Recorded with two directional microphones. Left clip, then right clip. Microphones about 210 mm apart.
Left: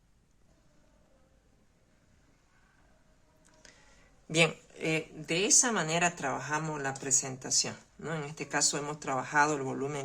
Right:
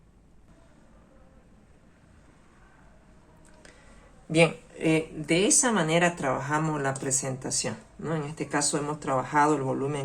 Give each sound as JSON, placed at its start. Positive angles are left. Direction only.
{"t": 4.3, "sound": "speech", "side_deg": 30}